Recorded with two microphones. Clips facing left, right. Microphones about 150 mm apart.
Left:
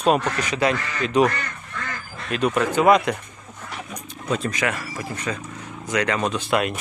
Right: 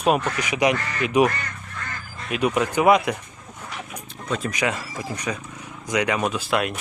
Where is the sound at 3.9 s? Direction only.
Centre (ahead or behind).